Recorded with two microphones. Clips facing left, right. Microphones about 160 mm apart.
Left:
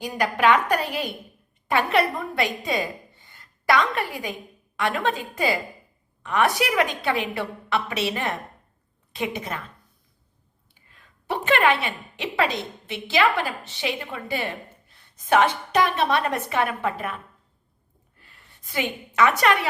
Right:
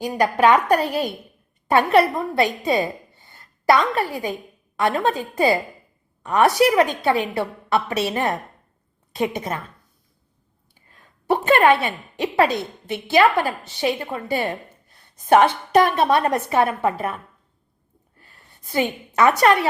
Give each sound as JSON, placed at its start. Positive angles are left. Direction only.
{"t": 0.0, "sound": "a woman's voice", "side_deg": -35}
{"t": 10.8, "sound": "a sound", "side_deg": -40}
{"t": 12.9, "sound": "a woman's voice", "side_deg": -40}
{"t": 18.2, "sound": "a woman's voice", "side_deg": -40}